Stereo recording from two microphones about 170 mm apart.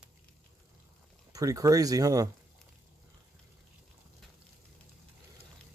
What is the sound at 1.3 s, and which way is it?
Speech, 20° right (ahead or behind).